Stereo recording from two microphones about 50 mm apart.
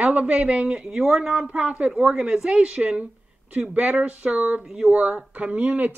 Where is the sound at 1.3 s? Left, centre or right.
Right.